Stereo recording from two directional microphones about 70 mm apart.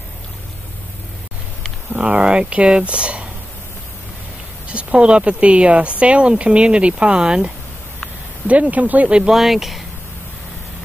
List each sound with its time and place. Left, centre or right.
1.9 s speech: centre
4.6 s speech: centre
9.3 s speech: centre